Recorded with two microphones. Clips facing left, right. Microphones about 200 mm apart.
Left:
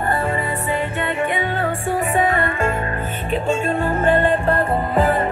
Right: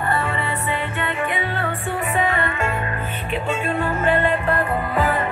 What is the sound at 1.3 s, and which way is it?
Music, 45° left (ahead or behind).